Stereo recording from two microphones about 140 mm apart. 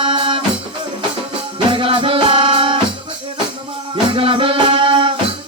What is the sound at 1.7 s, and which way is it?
Music, 40° right (ahead or behind).